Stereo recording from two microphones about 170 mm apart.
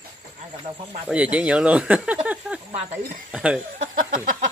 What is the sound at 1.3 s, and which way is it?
Speech, 5° right (ahead or behind).